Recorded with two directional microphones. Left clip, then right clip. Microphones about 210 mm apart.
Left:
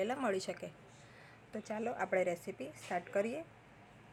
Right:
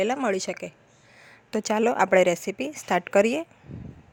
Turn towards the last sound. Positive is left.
turn(degrees=-45)  # may be behind; listen again after turning